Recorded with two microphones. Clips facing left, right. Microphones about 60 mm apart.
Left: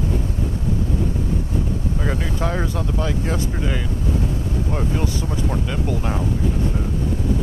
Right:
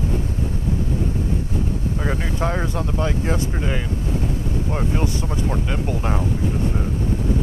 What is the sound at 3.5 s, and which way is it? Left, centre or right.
Speech, centre.